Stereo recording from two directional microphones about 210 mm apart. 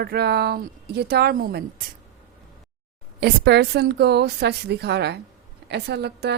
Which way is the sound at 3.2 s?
50° right (ahead or behind).